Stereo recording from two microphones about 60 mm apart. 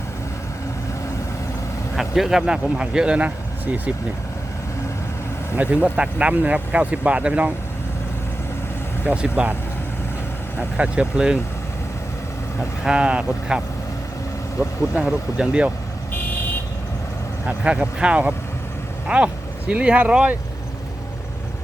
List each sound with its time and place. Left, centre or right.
2.0 s speech: centre; by 3.9 s right
5.5 s speech: centre
9.0 s speech: right
10.6 s speech: right
12.8 s speech: centre
14.6 s speech: centre
17.4 s speech: right